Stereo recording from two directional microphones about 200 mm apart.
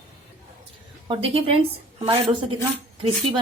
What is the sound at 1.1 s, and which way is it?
Speech, 25° right (ahead or behind).